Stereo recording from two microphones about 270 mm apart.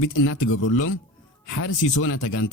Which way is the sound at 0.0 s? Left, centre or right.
Left.